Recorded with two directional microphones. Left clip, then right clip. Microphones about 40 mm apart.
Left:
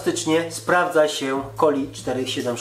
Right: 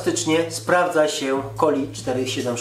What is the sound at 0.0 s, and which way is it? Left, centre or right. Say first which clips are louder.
Speech: right 1 dB; right.